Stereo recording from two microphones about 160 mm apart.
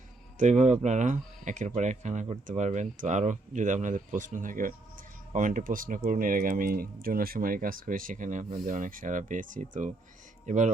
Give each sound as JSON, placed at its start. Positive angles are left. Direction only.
{"t": 0.3, "sound": "speech", "side_deg": -45}